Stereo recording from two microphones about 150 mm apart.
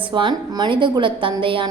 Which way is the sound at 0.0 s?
35° right (ahead or behind).